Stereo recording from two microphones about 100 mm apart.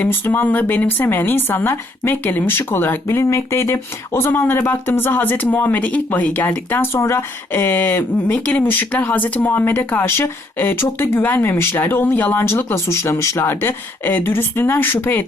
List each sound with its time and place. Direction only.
0.0 s speech: 20° left (ahead or behind)